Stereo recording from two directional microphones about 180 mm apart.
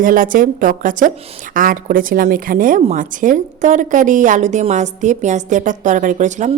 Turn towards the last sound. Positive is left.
turn(degrees=-40)  # may be behind; listen again after turning